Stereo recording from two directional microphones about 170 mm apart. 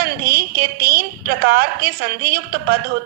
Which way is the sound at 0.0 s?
65° right (ahead or behind).